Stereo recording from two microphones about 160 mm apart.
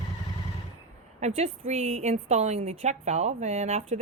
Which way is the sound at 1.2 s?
45° right (ahead or behind).